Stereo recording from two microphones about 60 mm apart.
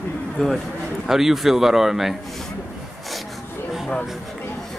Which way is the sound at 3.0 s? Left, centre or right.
Centre.